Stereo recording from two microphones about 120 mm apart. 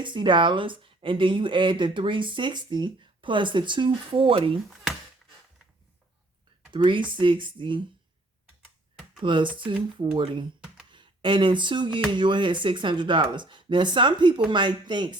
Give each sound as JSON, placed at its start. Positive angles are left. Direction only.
{"t": 0.0, "sound": "speech", "side_deg": -40}
{"t": 4.7, "sound": "a sound", "side_deg": 0}
{"t": 6.7, "sound": "speech", "side_deg": -40}
{"t": 9.2, "sound": "speech", "side_deg": -40}